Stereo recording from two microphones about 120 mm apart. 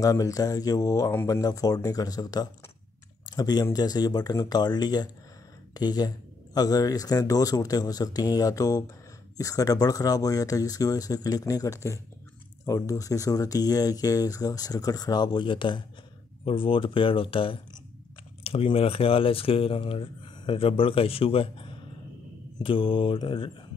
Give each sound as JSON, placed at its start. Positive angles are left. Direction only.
{"t": 0.0, "sound": "speech", "side_deg": 30}